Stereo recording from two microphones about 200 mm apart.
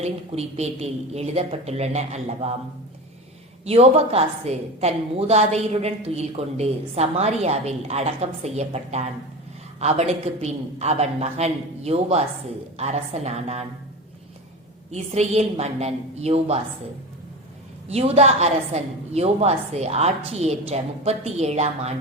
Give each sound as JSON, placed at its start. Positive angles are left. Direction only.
{"t": 0.0, "sound": "a woman's voice", "side_deg": -30}
{"t": 3.7, "sound": "a woman's voice", "side_deg": -30}
{"t": 14.9, "sound": "a woman's voice", "side_deg": -35}
{"t": 17.8, "sound": "a woman's voice", "side_deg": -30}